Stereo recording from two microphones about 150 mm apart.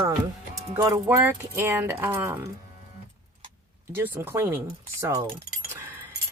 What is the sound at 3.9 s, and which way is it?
Speech, 15° right (ahead or behind).